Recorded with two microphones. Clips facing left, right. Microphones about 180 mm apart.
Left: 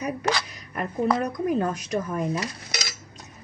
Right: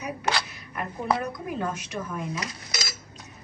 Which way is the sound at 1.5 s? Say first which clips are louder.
Left 6 dB; 40° left (ahead or behind).